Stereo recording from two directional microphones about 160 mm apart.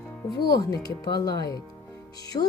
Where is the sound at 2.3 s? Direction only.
30° left (ahead or behind).